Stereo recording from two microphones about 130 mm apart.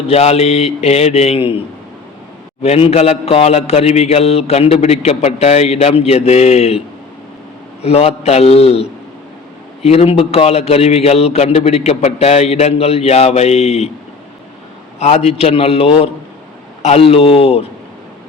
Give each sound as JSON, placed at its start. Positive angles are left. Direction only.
{"t": 0.1, "sound": "mantra", "side_deg": 50}
{"t": 2.6, "sound": "mantra", "side_deg": 50}
{"t": 7.8, "sound": "mantra", "side_deg": 50}
{"t": 14.9, "sound": "mantra", "side_deg": 55}